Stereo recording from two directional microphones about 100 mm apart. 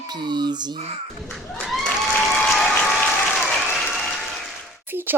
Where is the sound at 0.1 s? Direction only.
45° right (ahead or behind).